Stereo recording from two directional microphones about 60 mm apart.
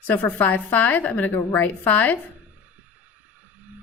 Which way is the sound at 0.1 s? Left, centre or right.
Left.